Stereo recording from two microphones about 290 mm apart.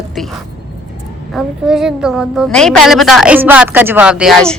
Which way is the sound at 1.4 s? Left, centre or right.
Centre.